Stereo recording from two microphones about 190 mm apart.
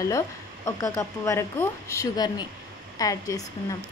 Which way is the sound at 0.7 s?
20° left (ahead or behind).